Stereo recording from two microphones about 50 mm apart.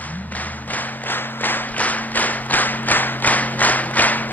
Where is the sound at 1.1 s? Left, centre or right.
Left.